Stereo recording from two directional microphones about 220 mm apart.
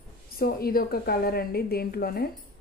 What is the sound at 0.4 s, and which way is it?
A woman's voice, 45° left (ahead or behind).